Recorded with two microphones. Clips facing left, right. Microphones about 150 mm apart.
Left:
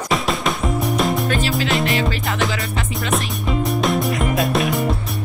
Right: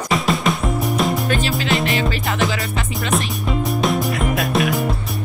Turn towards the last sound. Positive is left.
turn(degrees=0)  # may be behind; listen again after turning